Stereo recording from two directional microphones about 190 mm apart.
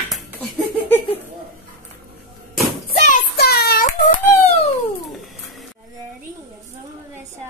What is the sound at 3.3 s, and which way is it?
Child singing, 55° left (ahead or behind).